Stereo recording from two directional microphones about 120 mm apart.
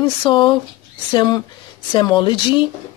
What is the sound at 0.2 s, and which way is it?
Speech, 40° left (ahead or behind).